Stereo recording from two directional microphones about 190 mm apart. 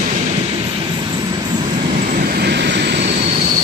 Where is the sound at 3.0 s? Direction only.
35° right (ahead or behind).